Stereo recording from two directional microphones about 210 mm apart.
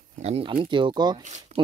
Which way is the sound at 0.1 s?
30° right (ahead or behind).